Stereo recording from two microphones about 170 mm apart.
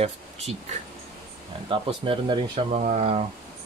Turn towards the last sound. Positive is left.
turn(degrees=-40)  # may be behind; listen again after turning